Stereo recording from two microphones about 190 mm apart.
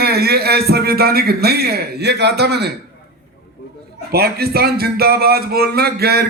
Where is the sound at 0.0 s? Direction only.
55° right (ahead or behind).